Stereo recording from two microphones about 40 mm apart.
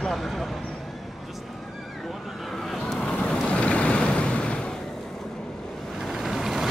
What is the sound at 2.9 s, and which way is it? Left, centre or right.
Waves, left.